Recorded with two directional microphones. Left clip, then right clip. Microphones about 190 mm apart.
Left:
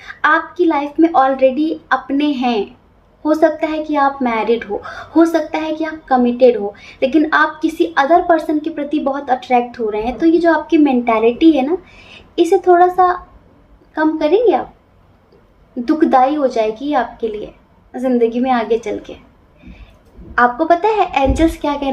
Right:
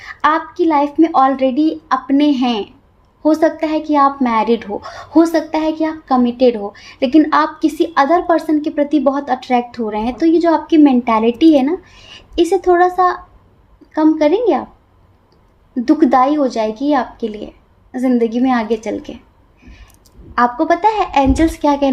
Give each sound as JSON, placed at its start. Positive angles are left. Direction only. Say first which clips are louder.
{"t": 0.0, "sound": "a sound", "louder": "even", "side_deg": -45}
{"t": 0.5, "sound": "a woman's voice", "louder": "right 2 dB", "side_deg": -40}
{"t": 12.1, "sound": "a sound", "louder": "left 1 dB", "side_deg": -40}
{"t": 13.0, "sound": "a woman's voice", "louder": "left 1 dB", "side_deg": -45}
{"t": 15.8, "sound": "a woman's voice", "louder": "even", "side_deg": -40}
{"t": 20.3, "sound": "a woman's voice", "louder": "left 1 dB", "side_deg": -45}